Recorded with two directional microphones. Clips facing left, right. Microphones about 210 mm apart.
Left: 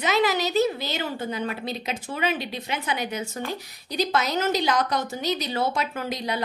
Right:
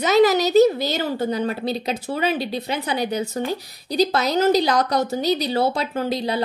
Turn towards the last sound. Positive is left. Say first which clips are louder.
# right 6 dB
turn(degrees=-30)  # may be behind; listen again after turning